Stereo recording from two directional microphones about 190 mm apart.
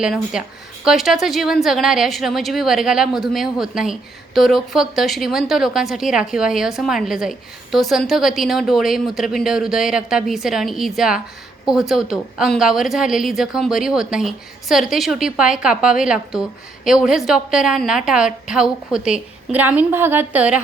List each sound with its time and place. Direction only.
0.0 s a woman's voice: 5° right (ahead or behind)